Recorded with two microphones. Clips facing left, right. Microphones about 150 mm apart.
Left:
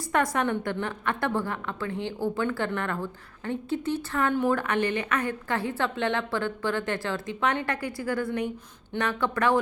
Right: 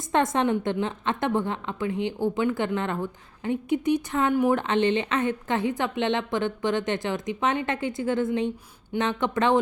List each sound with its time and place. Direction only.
0.1 s a woman's voice: 25° right (ahead or behind)